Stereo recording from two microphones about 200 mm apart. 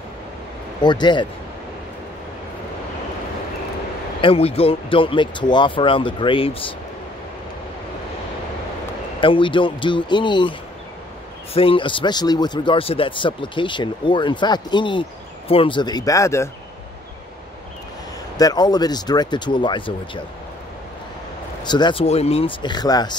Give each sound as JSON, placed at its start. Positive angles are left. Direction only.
{"t": 0.8, "sound": "speech", "side_deg": 20}
{"t": 4.2, "sound": "speech", "side_deg": 30}
{"t": 9.2, "sound": "speech", "side_deg": 25}
{"t": 11.5, "sound": "speech", "side_deg": 25}
{"t": 18.4, "sound": "speech", "side_deg": 20}
{"t": 21.6, "sound": "speech", "side_deg": 20}